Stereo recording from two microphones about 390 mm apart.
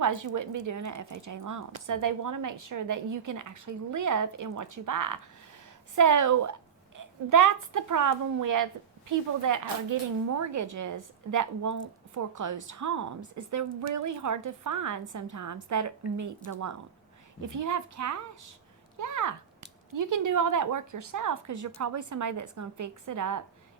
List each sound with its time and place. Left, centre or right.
0.0 s a woman's voice: right